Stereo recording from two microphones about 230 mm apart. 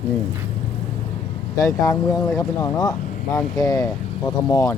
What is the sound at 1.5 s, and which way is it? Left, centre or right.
Speech, centre.